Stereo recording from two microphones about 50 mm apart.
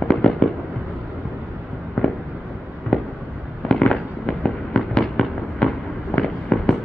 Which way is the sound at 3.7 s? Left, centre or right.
Centre.